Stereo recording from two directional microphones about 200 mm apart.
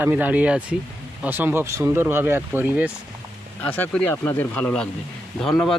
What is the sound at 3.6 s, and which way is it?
Speech, 10° left (ahead or behind).